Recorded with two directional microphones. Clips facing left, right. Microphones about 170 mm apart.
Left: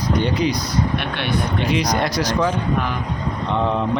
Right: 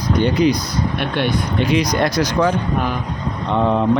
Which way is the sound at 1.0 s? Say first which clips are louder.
Right 3 dB; 50° right (ahead or behind).